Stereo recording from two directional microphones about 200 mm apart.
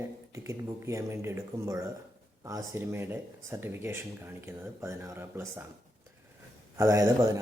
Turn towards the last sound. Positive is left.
turn(degrees=-15)  # may be behind; listen again after turning